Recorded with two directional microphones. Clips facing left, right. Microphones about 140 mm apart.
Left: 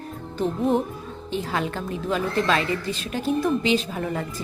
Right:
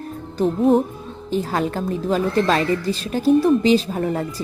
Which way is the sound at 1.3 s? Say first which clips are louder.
Right 5 dB; 40° right (ahead or behind).